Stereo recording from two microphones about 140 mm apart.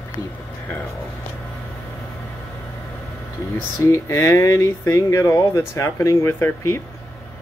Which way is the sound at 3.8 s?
20° left (ahead or behind).